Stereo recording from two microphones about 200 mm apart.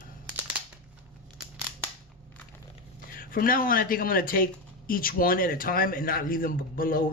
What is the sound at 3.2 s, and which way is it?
A man's voice, 45° left (ahead or behind).